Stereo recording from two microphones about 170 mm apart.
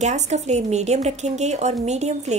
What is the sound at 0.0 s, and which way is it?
A woman's voice, 40° right (ahead or behind).